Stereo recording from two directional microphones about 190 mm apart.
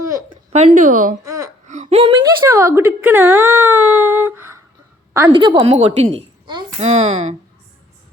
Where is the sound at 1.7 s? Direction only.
35° right (ahead or behind).